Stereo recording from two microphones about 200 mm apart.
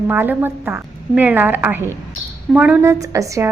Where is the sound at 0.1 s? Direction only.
10° right (ahead or behind).